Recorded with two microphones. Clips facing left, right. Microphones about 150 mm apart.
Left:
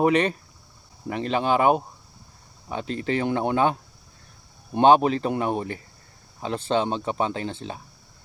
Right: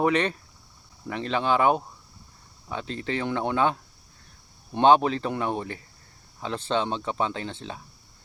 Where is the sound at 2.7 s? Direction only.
45° left (ahead or behind).